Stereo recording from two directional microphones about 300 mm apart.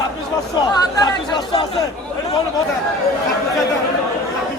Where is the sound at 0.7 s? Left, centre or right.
Centre.